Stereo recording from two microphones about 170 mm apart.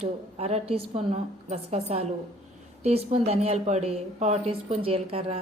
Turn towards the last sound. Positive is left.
turn(degrees=-35)  # may be behind; listen again after turning